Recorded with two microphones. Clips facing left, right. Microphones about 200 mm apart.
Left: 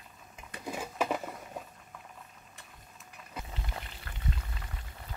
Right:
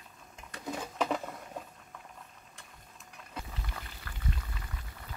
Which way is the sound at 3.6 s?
25° left (ahead or behind).